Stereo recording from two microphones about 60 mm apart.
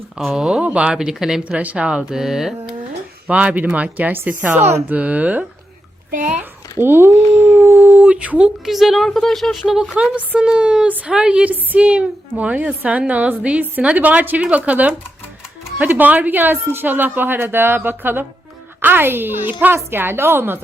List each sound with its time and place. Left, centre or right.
0.2 s speech: centre
0.9 s speech: centre
1.5 s a woman's voice: right
2.0 s speech: centre
3.2 s a woman's voice: right
6.8 s speech: right
7.5 s howl: right
7.8 s dog: right
8.1 s speech: centre
8.6 s speech: centre
10.2 s speech: right
10.8 s a woman's voice: right
11.1 s a woman's voice: centre; by 20.6 s right